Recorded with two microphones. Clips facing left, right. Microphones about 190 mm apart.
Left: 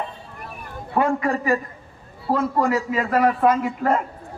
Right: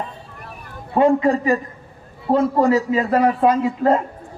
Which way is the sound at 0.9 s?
25° right (ahead or behind).